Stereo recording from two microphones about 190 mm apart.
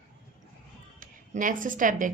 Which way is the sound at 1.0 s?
45° right (ahead or behind).